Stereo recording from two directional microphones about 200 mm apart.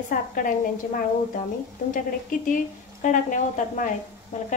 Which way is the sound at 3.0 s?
40° left (ahead or behind).